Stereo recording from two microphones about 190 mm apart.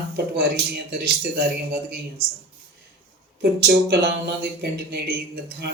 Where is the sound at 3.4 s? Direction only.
60° right (ahead or behind).